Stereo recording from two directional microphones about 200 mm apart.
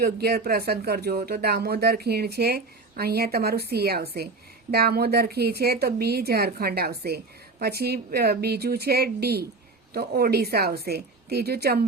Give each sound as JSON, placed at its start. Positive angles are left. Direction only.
{"t": 0.0, "sound": "speech", "side_deg": -50}